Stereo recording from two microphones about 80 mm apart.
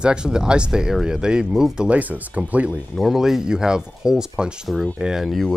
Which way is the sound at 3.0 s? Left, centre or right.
Centre.